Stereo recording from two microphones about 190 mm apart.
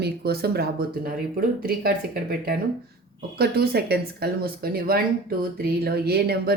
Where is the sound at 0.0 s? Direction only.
55° right (ahead or behind).